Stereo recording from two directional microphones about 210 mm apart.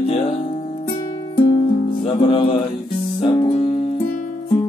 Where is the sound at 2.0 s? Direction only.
25° left (ahead or behind).